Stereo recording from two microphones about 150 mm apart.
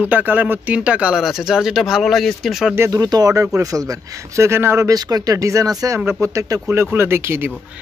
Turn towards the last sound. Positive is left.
turn(degrees=-15)  # may be behind; listen again after turning